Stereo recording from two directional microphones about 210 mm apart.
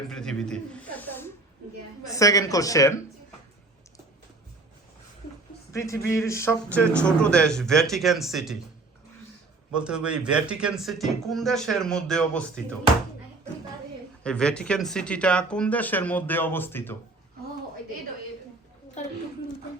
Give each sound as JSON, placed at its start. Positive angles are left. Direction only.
{"t": 0.1, "sound": "speech", "side_deg": 5}
{"t": 5.7, "sound": "speech", "side_deg": 15}
{"t": 9.7, "sound": "speech", "side_deg": -5}
{"t": 14.3, "sound": "speech", "side_deg": 5}